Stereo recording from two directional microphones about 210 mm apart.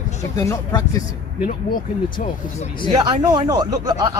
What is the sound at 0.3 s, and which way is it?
Speech, 15° left (ahead or behind).